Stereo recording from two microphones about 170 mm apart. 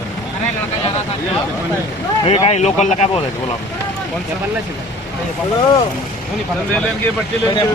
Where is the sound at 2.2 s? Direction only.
30° left (ahead or behind).